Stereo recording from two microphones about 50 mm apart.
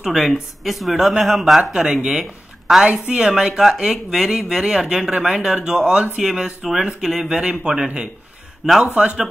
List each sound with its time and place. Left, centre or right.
0.0 s speech: centre
1.6 s speech: centre